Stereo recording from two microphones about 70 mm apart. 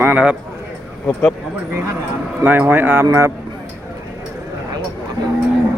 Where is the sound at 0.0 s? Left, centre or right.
Right.